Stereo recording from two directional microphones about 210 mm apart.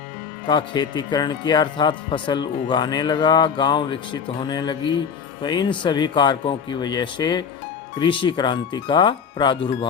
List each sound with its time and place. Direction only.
0.4 s speech: 20° left (ahead or behind)